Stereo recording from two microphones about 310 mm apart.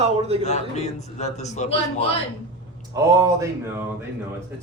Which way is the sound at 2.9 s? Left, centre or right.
Centre.